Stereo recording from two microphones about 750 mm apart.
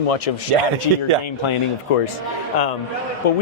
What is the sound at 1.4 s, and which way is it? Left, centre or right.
Speech, left.